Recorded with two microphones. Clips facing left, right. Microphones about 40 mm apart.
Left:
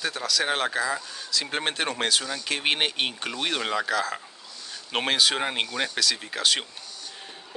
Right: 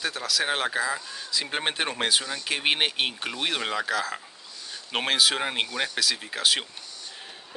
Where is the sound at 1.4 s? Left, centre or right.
Centre.